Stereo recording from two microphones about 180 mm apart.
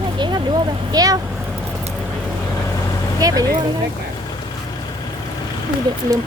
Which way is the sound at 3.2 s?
20° right (ahead or behind).